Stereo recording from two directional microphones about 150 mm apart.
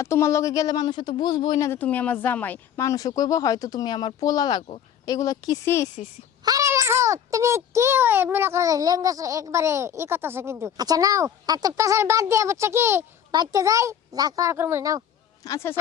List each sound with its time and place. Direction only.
0.0 s speech: 20° left (ahead or behind)
1.8 s speech: 10° left (ahead or behind)
6.4 s a child's voice: 25° right (ahead or behind)
15.4 s speech: 20° left (ahead or behind)